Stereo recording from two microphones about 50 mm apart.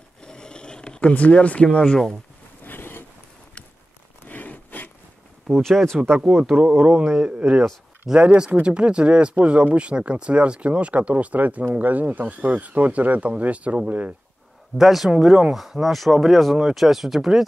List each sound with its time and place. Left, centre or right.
0.2 s a sound: centre
1.1 s speech: left
2.6 s a sound: left
4.3 s zipper: left
5.6 s speech: centre
6.5 s speech: right
8.6 s speech: right
14.8 s speech: centre